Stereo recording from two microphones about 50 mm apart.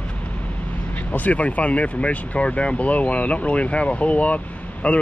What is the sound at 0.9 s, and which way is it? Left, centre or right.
Speech, left.